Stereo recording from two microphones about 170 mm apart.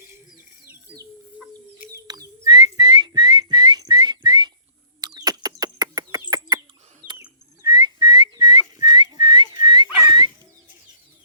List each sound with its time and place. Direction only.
2.0 s whistling: 25° right (ahead or behind)
4.9 s bird: 20° right (ahead or behind)
7.6 s whistling: 25° right (ahead or behind)